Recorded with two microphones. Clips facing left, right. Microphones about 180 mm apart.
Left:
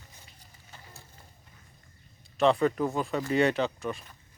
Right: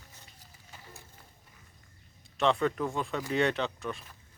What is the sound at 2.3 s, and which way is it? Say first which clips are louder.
Speech: left 4 dB; centre (ahead or behind).